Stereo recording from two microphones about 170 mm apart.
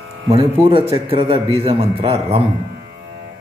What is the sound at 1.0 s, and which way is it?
A man's voice, 35° right (ahead or behind).